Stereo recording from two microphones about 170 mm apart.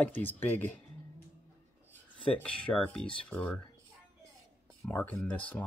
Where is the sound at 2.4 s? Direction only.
5° left (ahead or behind).